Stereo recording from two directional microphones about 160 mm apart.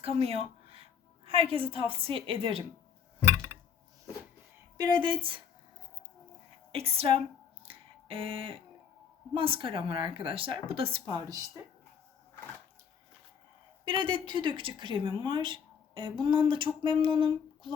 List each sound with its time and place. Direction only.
0.0 s a sound: 40° right (ahead or behind)
2.0 s speech: 35° right (ahead or behind)
4.8 s speech: 30° right (ahead or behind)
6.7 s speech: 35° right (ahead or behind)
7.6 s a sound: 35° right (ahead or behind)
9.3 s speech: 35° right (ahead or behind)
13.8 s speech: 30° right (ahead or behind)